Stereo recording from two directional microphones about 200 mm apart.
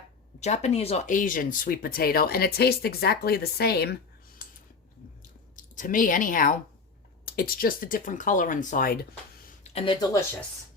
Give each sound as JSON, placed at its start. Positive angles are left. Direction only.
{"t": 0.3, "sound": "speech", "side_deg": 35}
{"t": 5.5, "sound": "speech", "side_deg": 40}
{"t": 9.6, "sound": "speech", "side_deg": 30}